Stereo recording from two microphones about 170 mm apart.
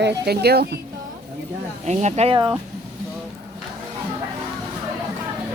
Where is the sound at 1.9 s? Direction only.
40° right (ahead or behind).